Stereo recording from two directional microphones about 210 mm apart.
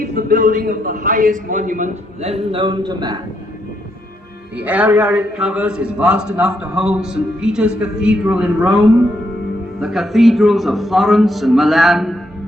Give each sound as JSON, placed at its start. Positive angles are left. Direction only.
{"t": 0.0, "sound": "a man's voice", "side_deg": -45}
{"t": 4.5, "sound": "a man's voice", "side_deg": -5}